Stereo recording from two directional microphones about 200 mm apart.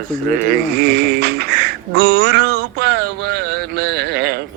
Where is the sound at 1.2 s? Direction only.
55° right (ahead or behind).